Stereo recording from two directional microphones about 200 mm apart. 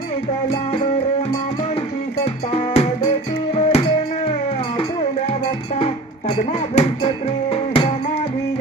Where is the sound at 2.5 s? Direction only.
30° left (ahead or behind).